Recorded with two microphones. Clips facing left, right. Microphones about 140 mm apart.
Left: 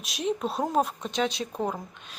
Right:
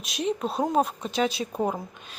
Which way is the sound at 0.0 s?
Centre (ahead or behind).